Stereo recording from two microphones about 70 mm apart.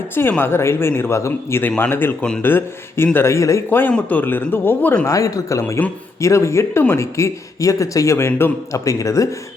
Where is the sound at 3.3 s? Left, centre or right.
Left.